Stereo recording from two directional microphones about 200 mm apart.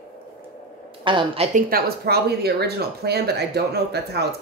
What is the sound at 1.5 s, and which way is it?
A woman's voice, 50° right (ahead or behind).